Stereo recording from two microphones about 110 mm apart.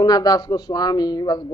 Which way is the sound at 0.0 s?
35° left (ahead or behind).